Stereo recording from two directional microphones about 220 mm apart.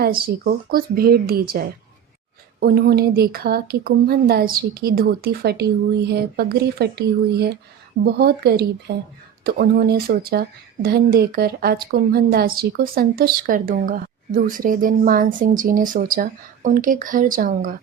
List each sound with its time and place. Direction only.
0.0 s speech: 40° right (ahead or behind)